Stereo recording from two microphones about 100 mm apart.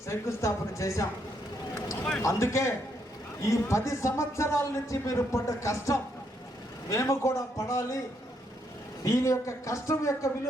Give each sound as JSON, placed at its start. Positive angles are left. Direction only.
{"t": 0.1, "sound": "speech", "side_deg": 30}
{"t": 2.2, "sound": "a man's voice", "side_deg": 30}
{"t": 9.0, "sound": "a man's voice", "side_deg": 30}